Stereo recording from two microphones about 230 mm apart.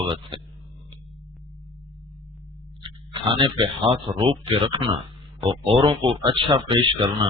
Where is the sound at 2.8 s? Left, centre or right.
Right.